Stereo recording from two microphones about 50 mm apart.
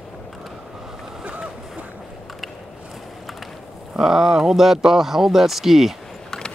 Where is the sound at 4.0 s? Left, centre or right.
Centre.